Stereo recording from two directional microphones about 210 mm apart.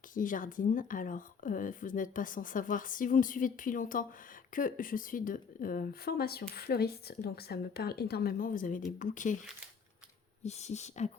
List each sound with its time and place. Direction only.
0.1 s a woman's voice: 40° left (ahead or behind)
10.4 s speech: 30° left (ahead or behind)